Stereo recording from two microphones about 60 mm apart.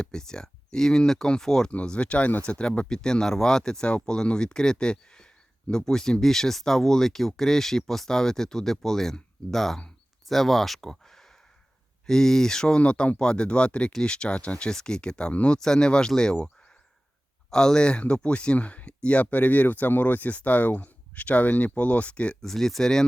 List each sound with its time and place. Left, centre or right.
0.0 s speech: centre
15.5 s speech: centre
17.5 s speech: centre
22.4 s speech: centre